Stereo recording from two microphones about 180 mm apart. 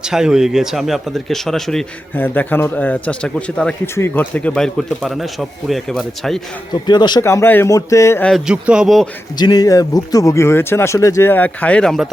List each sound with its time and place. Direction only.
0.1 s speech: 5° right (ahead or behind)
6.8 s speech: 25° left (ahead or behind)
8.3 s speech: 5° right (ahead or behind)
9.4 s speech: 20° left (ahead or behind); by 12.0 s 5° left (ahead or behind)